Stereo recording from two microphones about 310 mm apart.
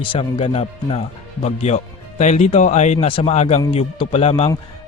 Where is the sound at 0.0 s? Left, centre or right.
Centre.